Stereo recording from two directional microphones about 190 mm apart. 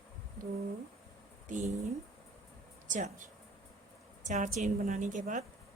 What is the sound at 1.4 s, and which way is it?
Speech, 40° right (ahead or behind).